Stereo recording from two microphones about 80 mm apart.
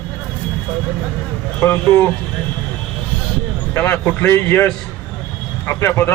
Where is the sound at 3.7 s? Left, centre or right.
Left.